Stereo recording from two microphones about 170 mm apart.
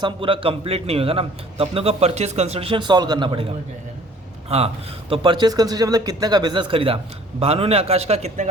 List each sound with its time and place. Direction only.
0.0 s a man's voice: 30° right (ahead or behind)
4.4 s a man's voice: 35° right (ahead or behind)